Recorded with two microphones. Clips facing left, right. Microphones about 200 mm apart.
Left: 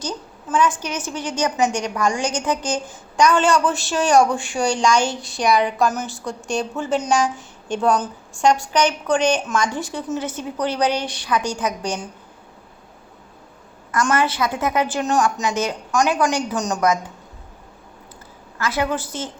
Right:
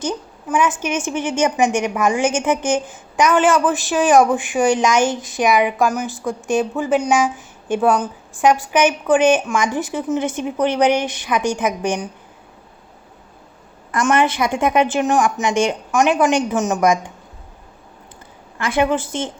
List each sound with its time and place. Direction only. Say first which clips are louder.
0.4 s a woman's voice: right 1 dB; 10° right (ahead or behind)
0.9 s a woman's voice: right 5 dB; 25° right (ahead or behind)
1.5 s a woman's voice: right 1 dB; 10° right (ahead or behind)
13.9 s a woman's voice: right 3 dB; 20° right (ahead or behind)
18.6 s a woman's voice: right 4 dB; 25° right (ahead or behind)